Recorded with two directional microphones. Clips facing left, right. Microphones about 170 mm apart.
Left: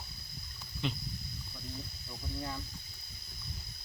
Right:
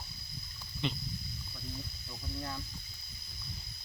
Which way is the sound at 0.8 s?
5° left (ahead or behind).